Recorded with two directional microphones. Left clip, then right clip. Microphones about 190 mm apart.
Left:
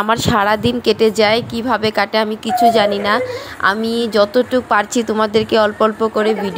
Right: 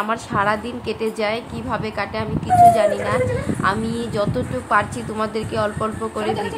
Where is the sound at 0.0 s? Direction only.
45° left (ahead or behind).